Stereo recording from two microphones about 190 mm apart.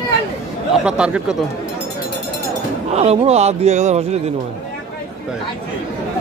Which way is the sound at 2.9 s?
35° right (ahead or behind).